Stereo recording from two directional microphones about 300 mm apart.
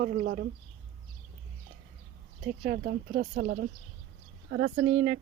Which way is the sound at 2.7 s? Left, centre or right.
Right.